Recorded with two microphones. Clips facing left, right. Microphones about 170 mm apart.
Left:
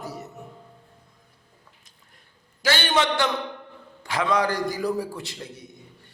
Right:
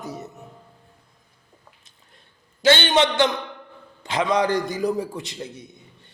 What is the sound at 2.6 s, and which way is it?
A man's voice, 25° right (ahead or behind).